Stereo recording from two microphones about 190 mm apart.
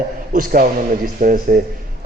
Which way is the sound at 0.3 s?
50° right (ahead or behind).